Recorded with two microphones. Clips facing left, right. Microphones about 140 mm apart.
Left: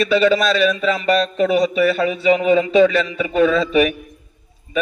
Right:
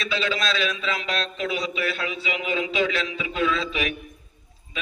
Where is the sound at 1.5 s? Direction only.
50° left (ahead or behind).